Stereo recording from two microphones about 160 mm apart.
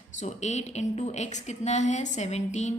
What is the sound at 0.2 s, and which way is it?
A woman's voice, 45° left (ahead or behind).